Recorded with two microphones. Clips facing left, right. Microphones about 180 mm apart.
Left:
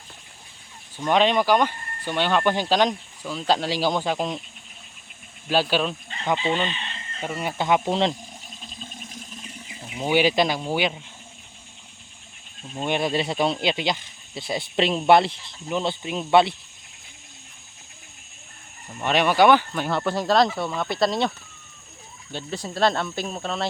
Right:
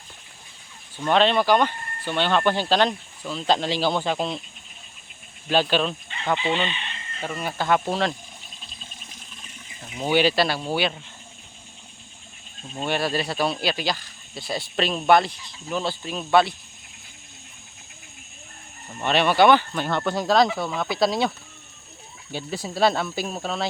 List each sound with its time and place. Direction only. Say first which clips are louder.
0.9 s speech: even; 10° left (ahead or behind)
5.5 s speech: right 1 dB; 5° left (ahead or behind)
7.2 s speech: left 1 dB; 15° left (ahead or behind)
9.8 s speech: even; 10° left (ahead or behind)
12.8 s speech: left 1 dB; 20° left (ahead or behind)
18.9 s speech: even; 10° left (ahead or behind)